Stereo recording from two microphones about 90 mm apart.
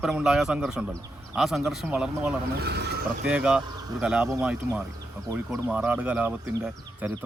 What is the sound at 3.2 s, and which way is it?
A man's voice, 10° right (ahead or behind).